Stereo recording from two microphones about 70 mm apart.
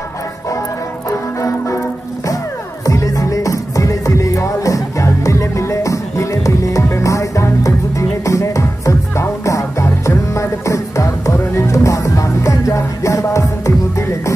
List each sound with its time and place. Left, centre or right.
2.9 s music: left